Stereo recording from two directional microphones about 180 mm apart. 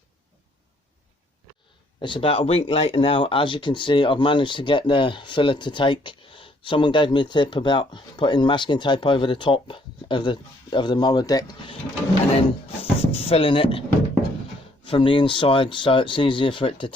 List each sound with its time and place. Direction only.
2.0 s speech: 25° left (ahead or behind)
14.8 s speech: 30° left (ahead or behind)